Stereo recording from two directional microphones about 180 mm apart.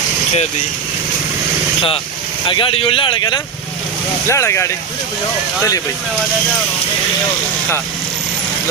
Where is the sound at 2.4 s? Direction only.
30° left (ahead or behind).